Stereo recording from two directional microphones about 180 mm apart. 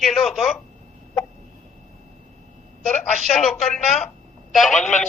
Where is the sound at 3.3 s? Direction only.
Centre (ahead or behind).